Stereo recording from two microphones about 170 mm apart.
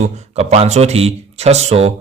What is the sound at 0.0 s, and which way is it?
Speech, 40° right (ahead or behind).